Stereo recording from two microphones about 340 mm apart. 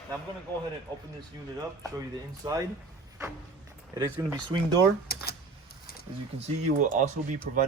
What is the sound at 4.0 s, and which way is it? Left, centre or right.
Speech, centre.